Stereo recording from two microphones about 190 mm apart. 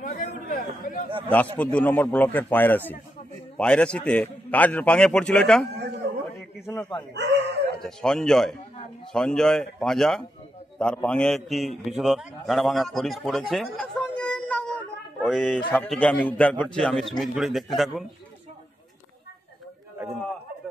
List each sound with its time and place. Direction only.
0.0 s chatter: 45° left (ahead or behind)
1.6 s a man's voice: 5° left (ahead or behind)
7.2 s chicken: 65° right (ahead or behind)
7.8 s a man's voice: 5° left (ahead or behind)